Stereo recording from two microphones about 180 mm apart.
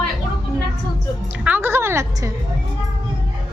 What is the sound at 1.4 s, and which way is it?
Speech, 10° right (ahead or behind).